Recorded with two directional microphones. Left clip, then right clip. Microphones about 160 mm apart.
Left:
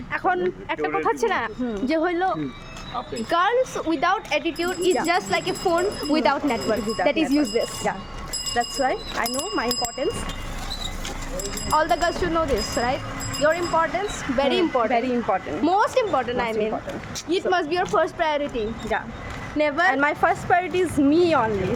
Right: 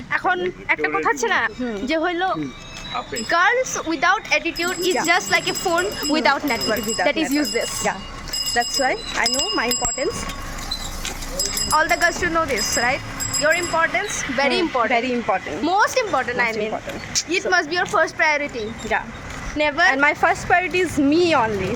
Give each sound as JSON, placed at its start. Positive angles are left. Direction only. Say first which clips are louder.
{"t": 0.1, "sound": "a man's voice", "louder": "right 2 dB", "side_deg": 20}
{"t": 8.5, "sound": "speech", "louder": "right 2 dB", "side_deg": -5}
{"t": 11.4, "sound": "speech", "louder": "right 2 dB", "side_deg": 20}
{"t": 14.8, "sound": "speech", "louder": "right 2 dB", "side_deg": -5}
{"t": 15.6, "sound": "speech", "louder": "right 1 dB", "side_deg": 20}
{"t": 19.9, "sound": "speech", "louder": "right 3 dB", "side_deg": -5}